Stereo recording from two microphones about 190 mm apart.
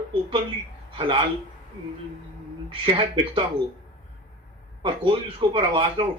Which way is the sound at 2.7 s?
25° right (ahead or behind).